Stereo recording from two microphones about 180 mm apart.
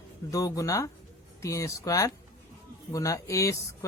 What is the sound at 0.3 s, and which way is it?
Speech, 20° left (ahead or behind).